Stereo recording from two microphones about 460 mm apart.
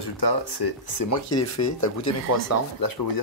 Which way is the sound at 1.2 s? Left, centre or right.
Left.